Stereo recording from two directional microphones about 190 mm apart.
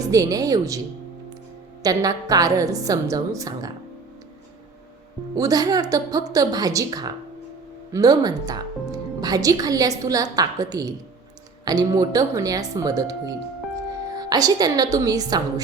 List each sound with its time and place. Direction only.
0.0 s a woman's voice: 20° right (ahead or behind)
1.8 s a woman's voice: 20° right (ahead or behind)
5.4 s a woman's voice: 20° right (ahead or behind)